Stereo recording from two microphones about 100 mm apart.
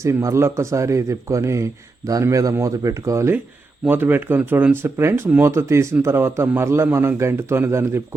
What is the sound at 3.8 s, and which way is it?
Speech, 20° right (ahead or behind).